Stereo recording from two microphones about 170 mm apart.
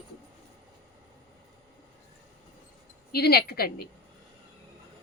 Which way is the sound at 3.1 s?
65° left (ahead or behind).